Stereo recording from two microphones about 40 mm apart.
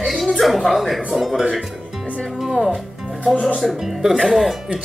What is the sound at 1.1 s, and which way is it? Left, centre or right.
Speech, centre.